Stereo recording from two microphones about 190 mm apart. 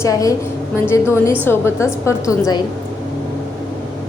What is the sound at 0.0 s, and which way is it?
A woman's voice, 15° left (ahead or behind).